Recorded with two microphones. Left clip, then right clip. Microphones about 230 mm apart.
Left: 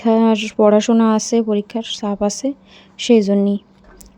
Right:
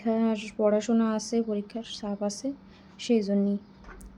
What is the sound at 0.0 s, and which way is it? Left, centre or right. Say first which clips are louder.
Speech: left 13 dB; left.